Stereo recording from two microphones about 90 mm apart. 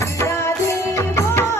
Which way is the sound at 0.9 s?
30° left (ahead or behind).